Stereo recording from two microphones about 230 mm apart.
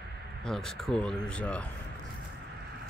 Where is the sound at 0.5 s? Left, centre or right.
Centre.